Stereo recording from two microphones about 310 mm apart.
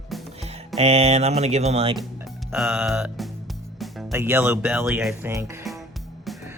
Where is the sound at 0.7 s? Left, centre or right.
Centre.